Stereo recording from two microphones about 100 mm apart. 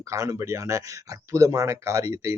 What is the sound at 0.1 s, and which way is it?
Speech, 30° right (ahead or behind).